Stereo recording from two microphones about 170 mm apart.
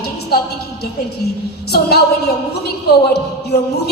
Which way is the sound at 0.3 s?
65° left (ahead or behind).